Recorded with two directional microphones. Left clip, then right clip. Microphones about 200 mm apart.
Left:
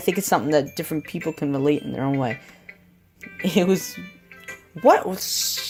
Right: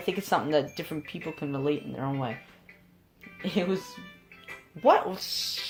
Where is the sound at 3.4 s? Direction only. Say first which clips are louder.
Left 9 dB; 45° left (ahead or behind).